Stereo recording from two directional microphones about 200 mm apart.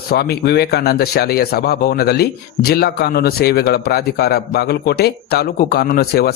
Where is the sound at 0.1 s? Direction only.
55° left (ahead or behind).